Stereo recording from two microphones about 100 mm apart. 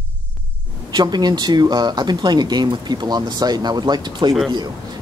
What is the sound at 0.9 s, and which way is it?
Speech, 45° right (ahead or behind).